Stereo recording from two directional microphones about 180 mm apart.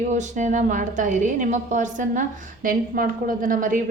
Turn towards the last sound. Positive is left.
turn(degrees=-50)  # may be behind; listen again after turning